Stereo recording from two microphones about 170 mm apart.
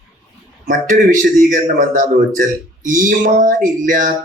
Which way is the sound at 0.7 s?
50° right (ahead or behind).